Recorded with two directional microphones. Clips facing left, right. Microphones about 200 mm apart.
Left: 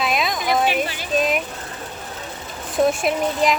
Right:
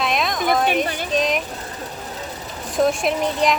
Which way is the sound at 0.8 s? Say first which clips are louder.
Right 1 dB; 5° left (ahead or behind).